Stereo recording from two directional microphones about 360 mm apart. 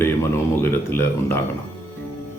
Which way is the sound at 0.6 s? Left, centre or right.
Centre.